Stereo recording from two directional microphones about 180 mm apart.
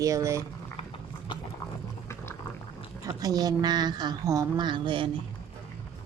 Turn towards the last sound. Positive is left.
turn(degrees=-25)  # may be behind; listen again after turning